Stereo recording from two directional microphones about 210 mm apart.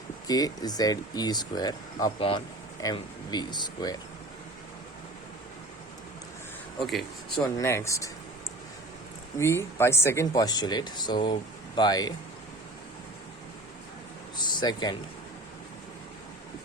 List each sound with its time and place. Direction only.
0.3 s speech: 20° left (ahead or behind)
6.7 s speech: centre (ahead or behind)
7.6 s speech: 15° left (ahead or behind)
9.4 s speech: 10° left (ahead or behind)
14.3 s a sound: 20° left (ahead or behind)